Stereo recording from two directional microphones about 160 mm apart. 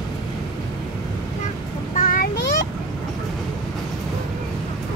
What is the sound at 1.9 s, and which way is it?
Vehicle, 60° left (ahead or behind).